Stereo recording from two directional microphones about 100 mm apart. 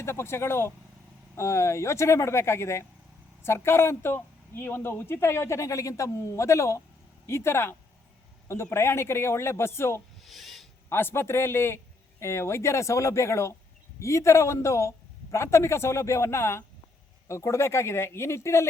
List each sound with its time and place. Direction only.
0.0 s speech: 25° left (ahead or behind)
10.2 s a sound: centre (ahead or behind)
10.8 s speech: 25° left (ahead or behind)